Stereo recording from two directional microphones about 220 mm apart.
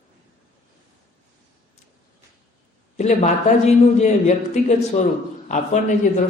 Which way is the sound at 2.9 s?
30° left (ahead or behind).